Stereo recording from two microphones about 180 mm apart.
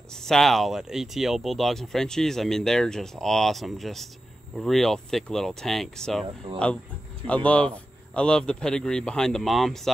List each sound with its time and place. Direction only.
0.1 s speech: 5° left (ahead or behind)
6.2 s speech: 30° right (ahead or behind)
7.2 s speech: 5° left (ahead or behind)